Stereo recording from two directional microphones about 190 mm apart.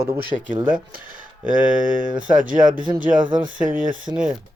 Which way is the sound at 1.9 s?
45° right (ahead or behind).